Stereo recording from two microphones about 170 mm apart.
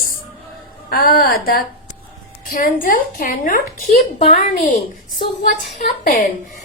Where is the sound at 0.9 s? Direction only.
60° left (ahead or behind).